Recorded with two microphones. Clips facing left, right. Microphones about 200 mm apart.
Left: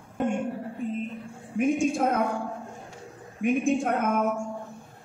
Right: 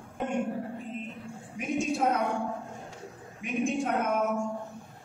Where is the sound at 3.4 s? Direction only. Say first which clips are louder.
Left 12 dB; 50° left (ahead or behind).